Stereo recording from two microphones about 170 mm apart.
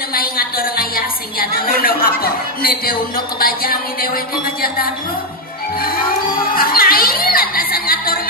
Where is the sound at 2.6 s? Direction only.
60° left (ahead or behind).